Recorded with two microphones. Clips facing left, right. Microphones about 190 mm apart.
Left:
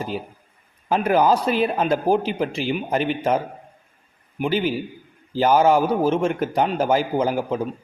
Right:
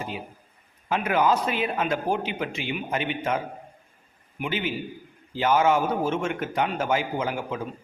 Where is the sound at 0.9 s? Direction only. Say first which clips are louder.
Left 5 dB; 35° left (ahead or behind).